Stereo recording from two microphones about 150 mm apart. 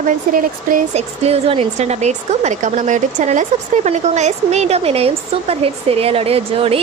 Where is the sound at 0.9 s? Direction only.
45° right (ahead or behind).